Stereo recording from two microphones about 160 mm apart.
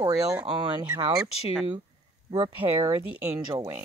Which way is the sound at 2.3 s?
30° right (ahead or behind).